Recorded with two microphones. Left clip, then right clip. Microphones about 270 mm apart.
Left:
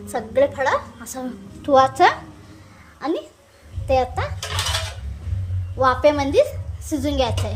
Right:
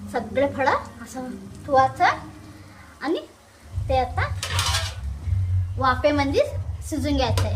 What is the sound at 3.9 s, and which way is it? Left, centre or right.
Speech, left.